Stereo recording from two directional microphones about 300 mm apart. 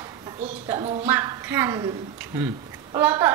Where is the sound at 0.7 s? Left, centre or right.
Centre.